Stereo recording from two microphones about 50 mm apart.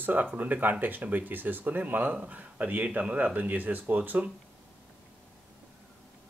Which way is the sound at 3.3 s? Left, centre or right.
Right.